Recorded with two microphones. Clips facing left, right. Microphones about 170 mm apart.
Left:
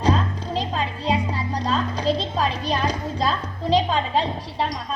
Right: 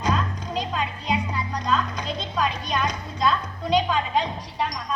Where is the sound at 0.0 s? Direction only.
30° left (ahead or behind).